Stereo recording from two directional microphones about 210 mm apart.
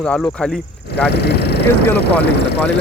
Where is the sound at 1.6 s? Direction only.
10° left (ahead or behind).